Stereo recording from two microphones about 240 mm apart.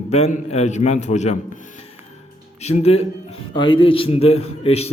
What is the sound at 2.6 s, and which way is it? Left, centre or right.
A man's voice, left.